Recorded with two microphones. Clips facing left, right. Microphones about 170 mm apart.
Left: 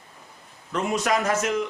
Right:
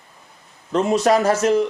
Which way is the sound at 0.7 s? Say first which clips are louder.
Right 7 dB; 30° right (ahead or behind).